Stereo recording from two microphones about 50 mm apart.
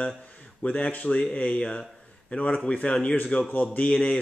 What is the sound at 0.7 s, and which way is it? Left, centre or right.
A man's voice, left.